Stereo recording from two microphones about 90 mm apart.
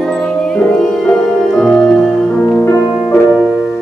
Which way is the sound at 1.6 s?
5° left (ahead or behind).